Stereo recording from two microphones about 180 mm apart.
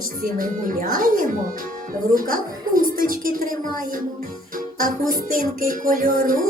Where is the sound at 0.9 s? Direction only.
50° right (ahead or behind).